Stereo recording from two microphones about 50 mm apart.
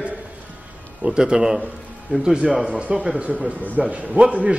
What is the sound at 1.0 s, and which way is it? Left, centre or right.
A man's voice, centre.